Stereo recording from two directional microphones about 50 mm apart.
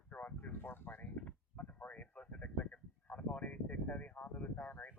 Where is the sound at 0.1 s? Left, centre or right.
Left.